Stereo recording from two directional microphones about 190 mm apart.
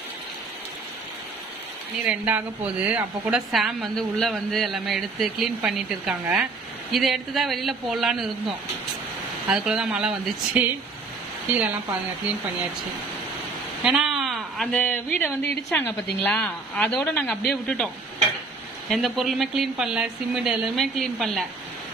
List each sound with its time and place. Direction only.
2.0 s a woman's voice: 10° right (ahead or behind)
13.8 s a woman's voice: centre (ahead or behind)
18.9 s a woman's voice: centre (ahead or behind)